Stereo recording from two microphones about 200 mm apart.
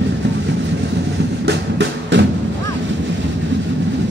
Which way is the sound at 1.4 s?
60° right (ahead or behind).